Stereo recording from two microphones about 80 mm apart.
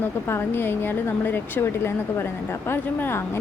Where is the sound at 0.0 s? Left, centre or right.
Left.